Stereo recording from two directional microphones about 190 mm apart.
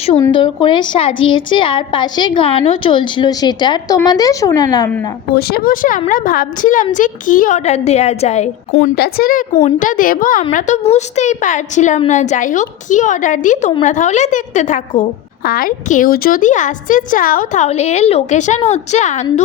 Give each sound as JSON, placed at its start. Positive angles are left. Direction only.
{"t": 0.3, "sound": "a woman's voice", "side_deg": 25}
{"t": 5.3, "sound": "a woman's voice", "side_deg": 55}
{"t": 9.0, "sound": "a woman's voice", "side_deg": 50}
{"t": 9.6, "sound": "a woman's voice", "side_deg": 40}